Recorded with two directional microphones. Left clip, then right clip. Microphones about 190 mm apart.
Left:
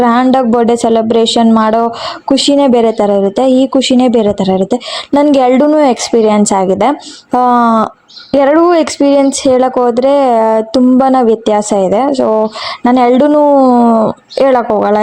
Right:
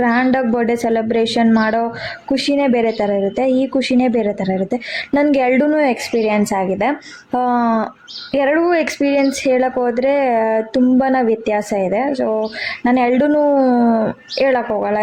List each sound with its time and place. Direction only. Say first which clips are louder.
0.0 s speech: left 7 dB; 30° left (ahead or behind)